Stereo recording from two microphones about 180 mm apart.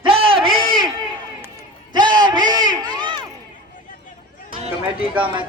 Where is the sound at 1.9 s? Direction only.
25° right (ahead or behind).